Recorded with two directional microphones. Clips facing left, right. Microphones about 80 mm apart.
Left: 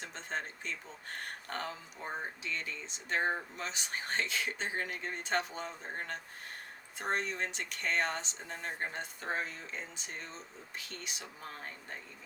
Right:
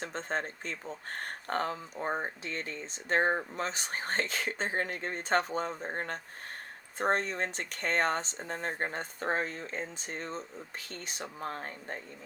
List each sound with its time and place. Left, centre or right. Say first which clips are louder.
0.0 s speech: right 5 dB; right